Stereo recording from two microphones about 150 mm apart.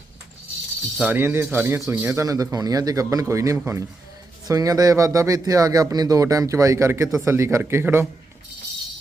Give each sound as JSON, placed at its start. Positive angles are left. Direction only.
{"t": 0.9, "sound": "speech", "side_deg": -10}